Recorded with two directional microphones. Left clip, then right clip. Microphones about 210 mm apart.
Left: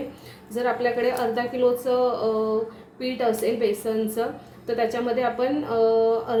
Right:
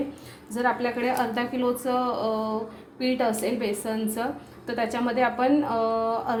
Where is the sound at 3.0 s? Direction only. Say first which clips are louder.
Left 1 dB; 25° right (ahead or behind).